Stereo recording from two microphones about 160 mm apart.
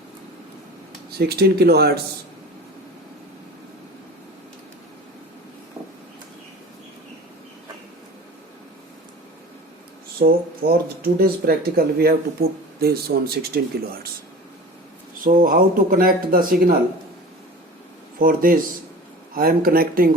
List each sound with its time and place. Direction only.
1.3 s speech: 80° right
10.2 s speech: 75° right (ahead or behind)
15.2 s speech: 60° right (ahead or behind)
18.2 s speech: 60° right (ahead or behind)